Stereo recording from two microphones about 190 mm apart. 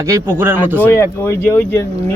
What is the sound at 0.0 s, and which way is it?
Speech, 15° right (ahead or behind).